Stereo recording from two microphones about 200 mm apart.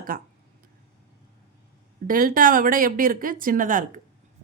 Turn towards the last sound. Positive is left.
turn(degrees=-40)  # may be behind; listen again after turning